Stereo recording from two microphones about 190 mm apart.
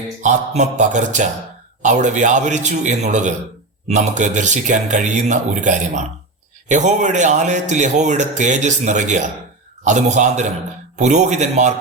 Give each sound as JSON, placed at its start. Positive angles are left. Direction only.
{"t": 0.2, "sound": "speech", "side_deg": -40}